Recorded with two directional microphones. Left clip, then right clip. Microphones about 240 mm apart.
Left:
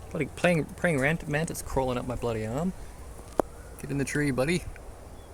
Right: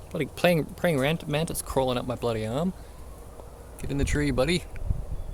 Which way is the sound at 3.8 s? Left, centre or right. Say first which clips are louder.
Right 1 dB; centre.